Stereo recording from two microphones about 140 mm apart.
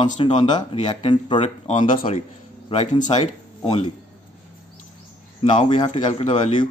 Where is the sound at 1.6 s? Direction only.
55° left (ahead or behind).